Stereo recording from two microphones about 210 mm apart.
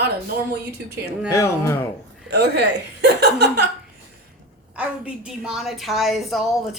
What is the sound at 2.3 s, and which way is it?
A woman's voice, 50° right (ahead or behind).